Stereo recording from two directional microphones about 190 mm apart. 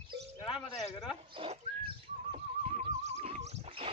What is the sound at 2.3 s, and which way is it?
Horse, 35° right (ahead or behind).